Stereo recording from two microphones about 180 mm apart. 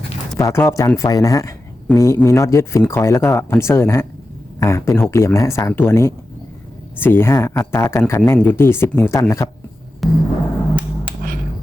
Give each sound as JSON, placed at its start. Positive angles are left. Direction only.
{"t": 0.3, "sound": "speech", "side_deg": 15}
{"t": 10.0, "sound": "music", "side_deg": 0}